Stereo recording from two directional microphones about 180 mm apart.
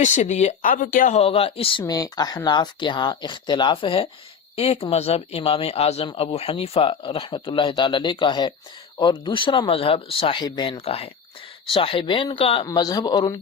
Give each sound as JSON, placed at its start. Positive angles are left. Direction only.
{"t": 0.0, "sound": "speech", "side_deg": 40}
{"t": 1.8, "sound": "speech", "side_deg": 20}